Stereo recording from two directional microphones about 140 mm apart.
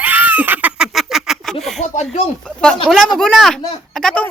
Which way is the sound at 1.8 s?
55° left (ahead or behind).